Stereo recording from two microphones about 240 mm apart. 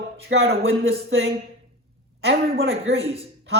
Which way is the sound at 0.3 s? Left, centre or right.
Right.